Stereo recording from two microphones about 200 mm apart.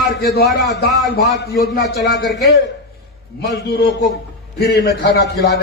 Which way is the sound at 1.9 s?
60° left (ahead or behind).